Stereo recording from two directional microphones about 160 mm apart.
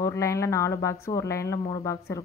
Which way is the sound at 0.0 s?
20° left (ahead or behind).